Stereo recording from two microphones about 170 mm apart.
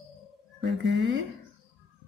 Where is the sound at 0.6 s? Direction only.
90° right.